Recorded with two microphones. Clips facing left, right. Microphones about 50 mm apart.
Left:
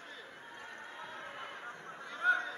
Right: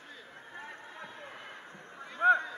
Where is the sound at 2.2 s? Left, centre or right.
Centre.